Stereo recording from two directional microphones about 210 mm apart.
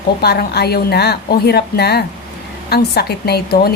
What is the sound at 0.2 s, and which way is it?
A woman's voice, 50° left (ahead or behind).